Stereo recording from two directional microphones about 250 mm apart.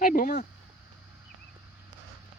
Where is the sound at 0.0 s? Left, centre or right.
Left.